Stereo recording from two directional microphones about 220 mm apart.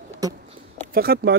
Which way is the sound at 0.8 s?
45° right (ahead or behind).